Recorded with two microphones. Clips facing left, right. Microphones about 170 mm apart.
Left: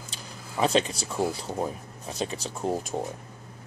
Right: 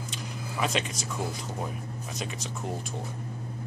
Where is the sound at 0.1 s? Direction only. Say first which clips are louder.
Right 3 dB; 35° left (ahead or behind).